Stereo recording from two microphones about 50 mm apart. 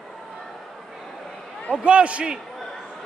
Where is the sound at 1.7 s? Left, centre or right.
Right.